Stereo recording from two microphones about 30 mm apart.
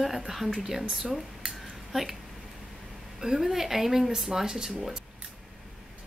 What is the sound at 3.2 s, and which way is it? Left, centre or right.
A woman's voice, centre.